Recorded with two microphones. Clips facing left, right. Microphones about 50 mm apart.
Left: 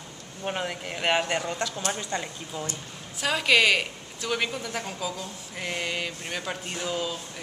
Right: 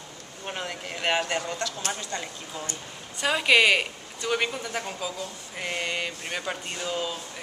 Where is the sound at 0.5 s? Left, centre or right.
Centre.